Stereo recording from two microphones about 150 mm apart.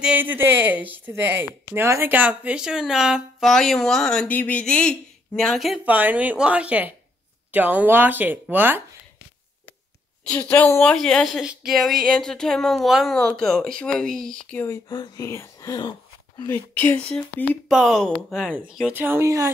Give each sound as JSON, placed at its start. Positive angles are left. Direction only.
{"t": 0.0, "sound": "speech", "side_deg": -10}
{"t": 5.9, "sound": "speech", "side_deg": -10}
{"t": 10.2, "sound": "speech", "side_deg": 10}
{"t": 14.5, "sound": "speech", "side_deg": 15}
{"t": 14.9, "sound": "speech", "side_deg": 25}
{"t": 16.4, "sound": "speech", "side_deg": 15}
{"t": 17.1, "sound": "speech", "side_deg": 0}